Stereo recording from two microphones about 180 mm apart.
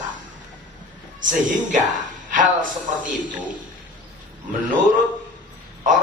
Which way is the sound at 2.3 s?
45° right (ahead or behind).